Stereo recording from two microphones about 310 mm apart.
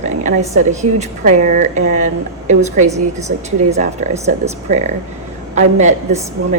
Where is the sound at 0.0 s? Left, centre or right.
Right.